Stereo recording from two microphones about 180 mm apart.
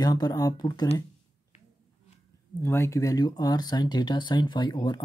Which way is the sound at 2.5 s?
15° left (ahead or behind).